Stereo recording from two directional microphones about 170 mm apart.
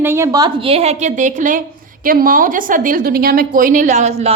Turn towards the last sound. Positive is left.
turn(degrees=-45)  # may be behind; listen again after turning